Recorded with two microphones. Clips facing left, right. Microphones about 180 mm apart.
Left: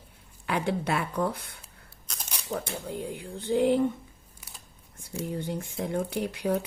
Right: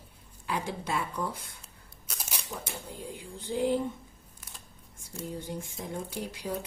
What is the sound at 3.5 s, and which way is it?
Speech, 65° left (ahead or behind).